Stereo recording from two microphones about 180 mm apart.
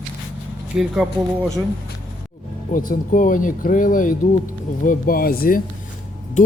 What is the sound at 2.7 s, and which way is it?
Speech, 50° left (ahead or behind).